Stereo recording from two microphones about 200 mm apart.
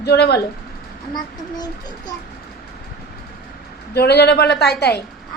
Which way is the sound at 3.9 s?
55° left (ahead or behind).